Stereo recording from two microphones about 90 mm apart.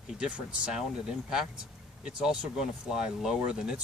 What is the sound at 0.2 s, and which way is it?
Speech, 10° right (ahead or behind).